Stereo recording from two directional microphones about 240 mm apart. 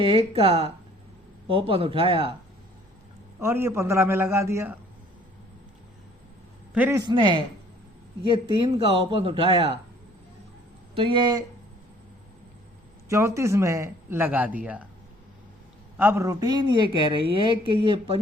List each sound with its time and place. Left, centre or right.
0.0 s speech: right
3.4 s speech: centre
6.7 s speech: centre
10.9 s speech: right
13.1 s speech: centre
16.0 s speech: centre